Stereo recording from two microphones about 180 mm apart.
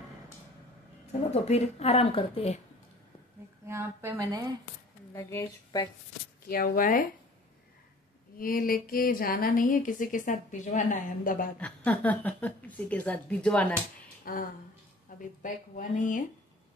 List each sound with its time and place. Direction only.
1.3 s a woman's voice: 35° left (ahead or behind)
3.6 s a woman's voice: 15° right (ahead or behind)
5.1 s speech: 20° left (ahead or behind)
6.4 s speech: 55° left (ahead or behind)
8.4 s speech: 55° left (ahead or behind)
11.5 s a woman's voice: 10° left (ahead or behind)
14.3 s speech: 50° left (ahead or behind)